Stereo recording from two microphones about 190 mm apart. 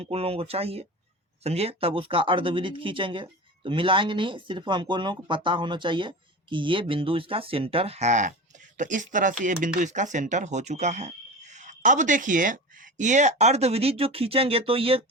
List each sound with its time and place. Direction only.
0.0 s speech: 30° right (ahead or behind)